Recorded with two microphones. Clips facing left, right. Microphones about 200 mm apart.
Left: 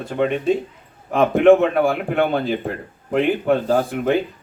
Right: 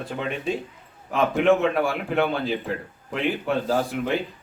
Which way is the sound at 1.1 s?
55° left (ahead or behind).